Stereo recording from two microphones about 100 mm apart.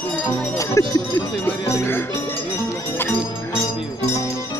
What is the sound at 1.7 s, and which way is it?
Music, 25° left (ahead or behind).